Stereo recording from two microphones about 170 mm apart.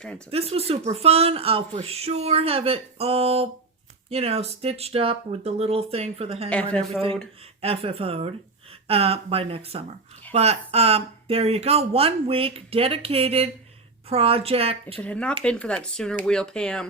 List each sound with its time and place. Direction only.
0.3 s speech: 35° right (ahead or behind)
6.5 s speech: 5° left (ahead or behind)
7.6 s speech: 35° right (ahead or behind)
15.0 s speech: 5° left (ahead or behind)